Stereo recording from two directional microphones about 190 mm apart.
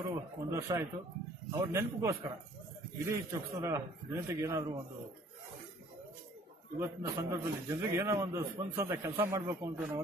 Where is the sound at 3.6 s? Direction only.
15° right (ahead or behind).